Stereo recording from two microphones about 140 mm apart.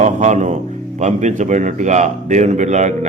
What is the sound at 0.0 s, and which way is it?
A man's voice, 60° right (ahead or behind).